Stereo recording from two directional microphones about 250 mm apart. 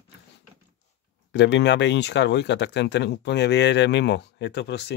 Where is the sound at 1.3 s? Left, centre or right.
Left.